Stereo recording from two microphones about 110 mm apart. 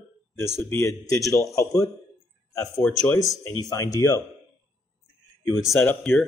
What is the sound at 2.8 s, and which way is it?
Speech, 10° left (ahead or behind).